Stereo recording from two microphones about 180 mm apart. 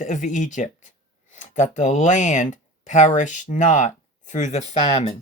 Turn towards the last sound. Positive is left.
turn(degrees=35)  # may be behind; listen again after turning